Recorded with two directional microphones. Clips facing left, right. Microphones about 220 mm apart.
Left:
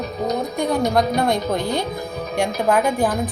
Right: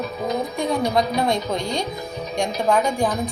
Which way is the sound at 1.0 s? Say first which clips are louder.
Left 2 dB; centre (ahead or behind).